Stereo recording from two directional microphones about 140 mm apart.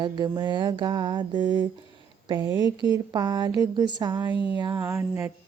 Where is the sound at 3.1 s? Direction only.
30° right (ahead or behind).